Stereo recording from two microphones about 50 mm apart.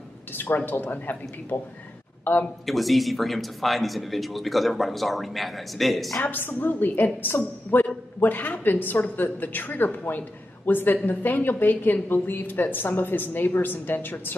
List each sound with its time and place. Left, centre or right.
0.3 s a woman's voice: left
2.6 s speech: centre
6.4 s a woman's voice: left